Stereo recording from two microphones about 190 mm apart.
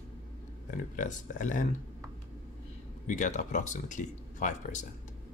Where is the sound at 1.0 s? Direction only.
40° left (ahead or behind).